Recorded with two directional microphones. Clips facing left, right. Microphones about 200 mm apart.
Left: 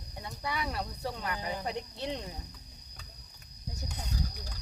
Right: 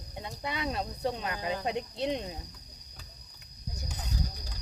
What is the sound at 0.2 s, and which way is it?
Speech, 20° right (ahead or behind).